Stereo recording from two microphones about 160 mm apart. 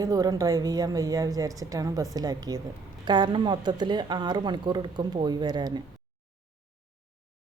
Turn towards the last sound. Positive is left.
turn(degrees=-25)  # may be behind; listen again after turning